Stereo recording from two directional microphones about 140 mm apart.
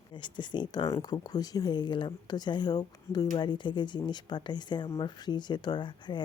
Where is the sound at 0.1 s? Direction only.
35° left (ahead or behind).